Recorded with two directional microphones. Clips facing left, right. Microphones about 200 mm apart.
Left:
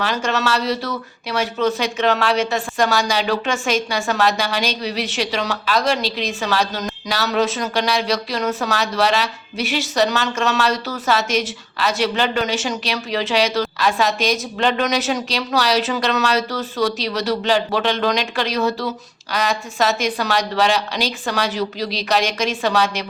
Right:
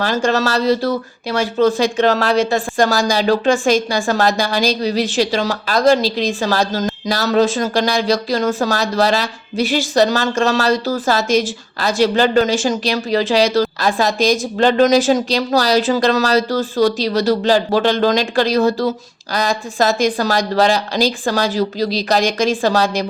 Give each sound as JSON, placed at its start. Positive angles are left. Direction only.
{"t": 0.0, "sound": "speech", "side_deg": -35}